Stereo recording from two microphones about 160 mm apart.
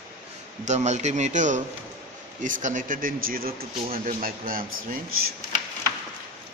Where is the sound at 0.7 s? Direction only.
45° right (ahead or behind); by 5.0 s 60° right (ahead or behind).